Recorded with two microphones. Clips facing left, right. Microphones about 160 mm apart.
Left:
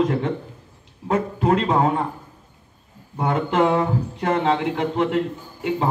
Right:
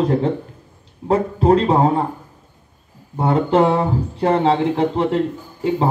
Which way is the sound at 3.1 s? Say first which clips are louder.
Right 5 dB; 35° right (ahead or behind).